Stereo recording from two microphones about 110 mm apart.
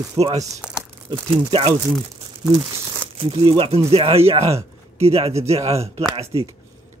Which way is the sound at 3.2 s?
55° right (ahead or behind).